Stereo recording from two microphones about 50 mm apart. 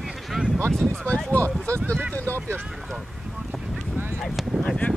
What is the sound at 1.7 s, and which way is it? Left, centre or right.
Speech, right.